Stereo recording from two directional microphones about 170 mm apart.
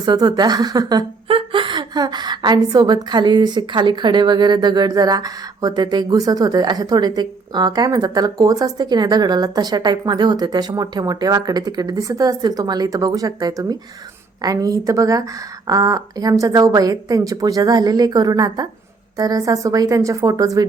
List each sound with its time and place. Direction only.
0.0 s a woman's voice: 25° right (ahead or behind)